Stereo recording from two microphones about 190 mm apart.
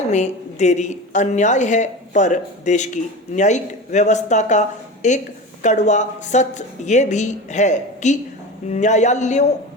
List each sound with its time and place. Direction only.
0.1 s a woman's voice: 40° left (ahead or behind)